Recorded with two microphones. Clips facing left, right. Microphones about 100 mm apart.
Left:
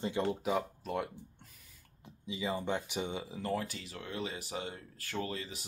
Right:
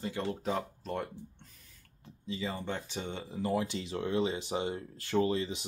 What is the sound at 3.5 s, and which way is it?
Speech, 20° right (ahead or behind).